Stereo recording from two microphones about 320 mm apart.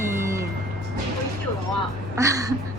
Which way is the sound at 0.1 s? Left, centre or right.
Centre.